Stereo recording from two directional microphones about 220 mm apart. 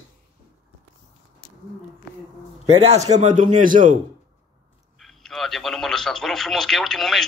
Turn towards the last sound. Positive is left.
turn(degrees=0)  # may be behind; listen again after turning